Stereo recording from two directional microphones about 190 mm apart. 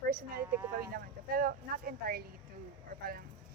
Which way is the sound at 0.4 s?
10° right (ahead or behind).